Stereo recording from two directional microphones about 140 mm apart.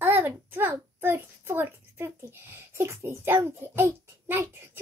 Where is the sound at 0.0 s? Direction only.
15° right (ahead or behind).